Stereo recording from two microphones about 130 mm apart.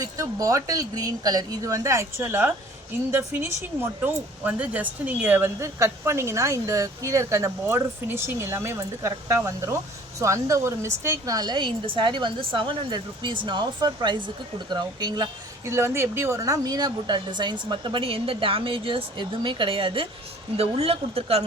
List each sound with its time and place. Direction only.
0.0 s speech: 25° right (ahead or behind)
15.6 s speech: 20° right (ahead or behind); by 21.4 s 50° right (ahead or behind)